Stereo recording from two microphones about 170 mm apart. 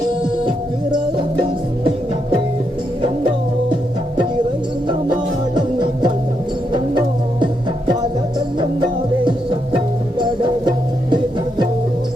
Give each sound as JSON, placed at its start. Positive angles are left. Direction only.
{"t": 0.4, "sound": "music", "side_deg": -30}
{"t": 3.0, "sound": "music", "side_deg": -25}
{"t": 5.5, "sound": "music", "side_deg": -25}